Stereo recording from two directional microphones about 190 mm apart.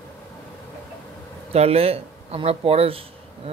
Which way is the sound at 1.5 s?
35° right (ahead or behind).